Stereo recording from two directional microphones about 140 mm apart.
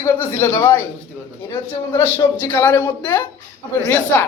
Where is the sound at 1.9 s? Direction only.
20° left (ahead or behind).